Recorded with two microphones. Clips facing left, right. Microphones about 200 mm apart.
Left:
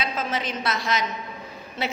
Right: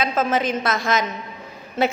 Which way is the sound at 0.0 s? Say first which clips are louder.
Right 7 dB; 50° right (ahead or behind).